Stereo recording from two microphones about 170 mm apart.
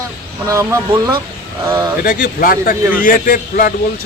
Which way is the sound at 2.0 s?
55° left (ahead or behind).